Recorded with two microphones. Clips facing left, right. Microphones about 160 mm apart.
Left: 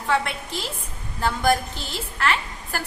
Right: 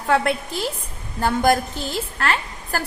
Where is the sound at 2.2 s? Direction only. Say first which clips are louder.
Left 2 dB; 40° right (ahead or behind).